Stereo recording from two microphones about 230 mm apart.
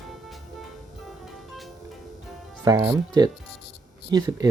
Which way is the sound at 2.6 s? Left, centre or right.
Centre.